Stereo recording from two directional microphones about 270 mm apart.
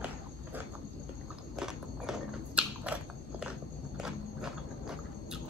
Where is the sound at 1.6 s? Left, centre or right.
Centre.